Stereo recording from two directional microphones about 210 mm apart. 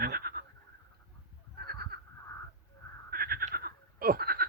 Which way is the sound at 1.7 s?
45° right (ahead or behind).